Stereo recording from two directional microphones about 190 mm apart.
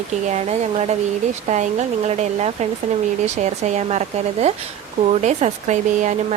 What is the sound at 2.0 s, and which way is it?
A woman's voice, 35° right (ahead or behind).